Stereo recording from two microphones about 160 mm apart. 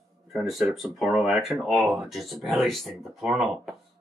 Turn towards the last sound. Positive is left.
turn(degrees=0)  # may be behind; listen again after turning